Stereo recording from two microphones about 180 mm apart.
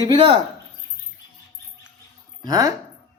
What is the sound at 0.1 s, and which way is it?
Speech, 25° right (ahead or behind).